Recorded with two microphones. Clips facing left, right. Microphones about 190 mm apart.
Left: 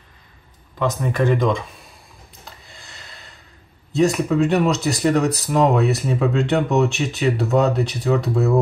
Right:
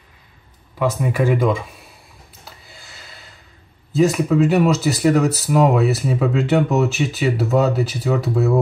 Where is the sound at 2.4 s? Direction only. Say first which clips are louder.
Even; 5° right (ahead or behind).